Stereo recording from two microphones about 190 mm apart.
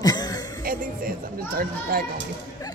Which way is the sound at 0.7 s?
50° right (ahead or behind).